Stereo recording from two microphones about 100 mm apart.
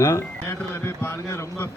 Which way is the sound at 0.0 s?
30° left (ahead or behind).